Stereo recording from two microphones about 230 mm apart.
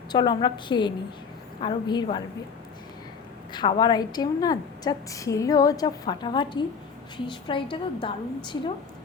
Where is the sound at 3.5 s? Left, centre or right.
Centre.